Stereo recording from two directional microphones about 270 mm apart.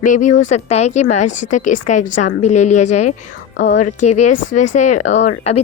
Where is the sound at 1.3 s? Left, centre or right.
Left.